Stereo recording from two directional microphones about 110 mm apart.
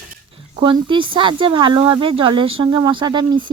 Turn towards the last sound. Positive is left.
turn(degrees=-45)  # may be behind; listen again after turning